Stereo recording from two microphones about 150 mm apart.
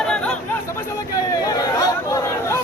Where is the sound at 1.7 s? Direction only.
20° left (ahead or behind).